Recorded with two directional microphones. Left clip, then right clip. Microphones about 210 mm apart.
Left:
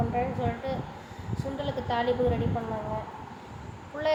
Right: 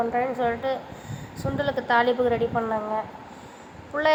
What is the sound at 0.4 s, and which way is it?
A woman's voice, 25° right (ahead or behind).